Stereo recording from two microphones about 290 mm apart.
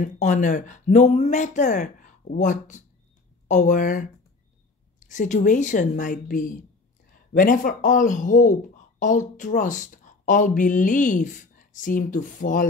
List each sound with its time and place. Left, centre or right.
0.0 s a woman's voice: left